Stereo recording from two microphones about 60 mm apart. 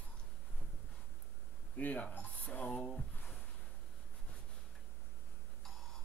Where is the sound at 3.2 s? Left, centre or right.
Left.